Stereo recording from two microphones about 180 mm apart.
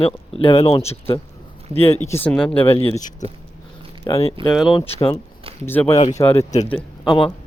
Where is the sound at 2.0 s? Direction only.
10° left (ahead or behind).